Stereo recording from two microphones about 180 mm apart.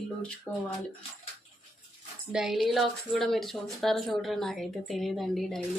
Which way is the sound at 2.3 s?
5° right (ahead or behind).